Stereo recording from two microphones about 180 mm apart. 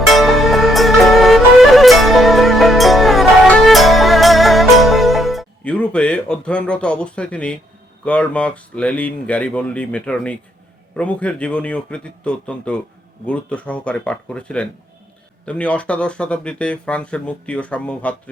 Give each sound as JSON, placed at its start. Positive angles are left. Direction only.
{"t": 0.1, "sound": "music", "side_deg": 0}
{"t": 8.0, "sound": "speech", "side_deg": 5}